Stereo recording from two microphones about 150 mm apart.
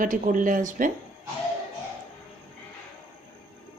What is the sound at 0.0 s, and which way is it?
Speech, 60° right (ahead or behind).